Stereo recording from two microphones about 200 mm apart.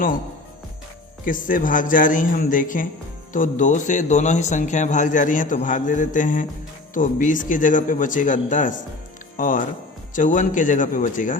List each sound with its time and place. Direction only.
1.2 s a man's voice: 45° left (ahead or behind)